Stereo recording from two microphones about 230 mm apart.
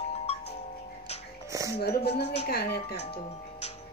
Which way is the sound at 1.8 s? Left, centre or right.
Left.